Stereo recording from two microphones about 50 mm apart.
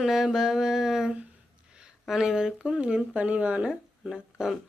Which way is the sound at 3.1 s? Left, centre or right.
Right.